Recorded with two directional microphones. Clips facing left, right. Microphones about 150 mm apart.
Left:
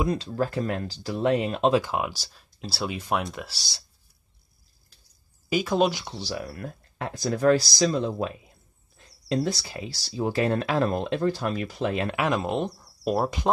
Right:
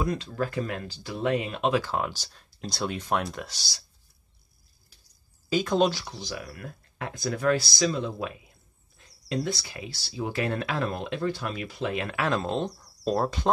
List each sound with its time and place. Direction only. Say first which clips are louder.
0.0 s speech: left 3 dB; 30° left (ahead or behind)
1.8 s speech: left 1 dB; 10° left (ahead or behind)
5.5 s speech: left 1 dB; 5° left (ahead or behind)
5.9 s speech: left 4 dB; 30° left (ahead or behind)
9.3 s speech: left 4 dB; 35° left (ahead or behind)
12.1 s speech: left 2 dB; 15° left (ahead or behind)